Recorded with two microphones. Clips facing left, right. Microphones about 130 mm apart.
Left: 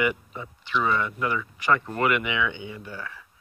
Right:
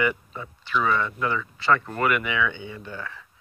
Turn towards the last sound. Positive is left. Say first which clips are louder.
# right 1 dB
turn(degrees=10)  # may be behind; listen again after turning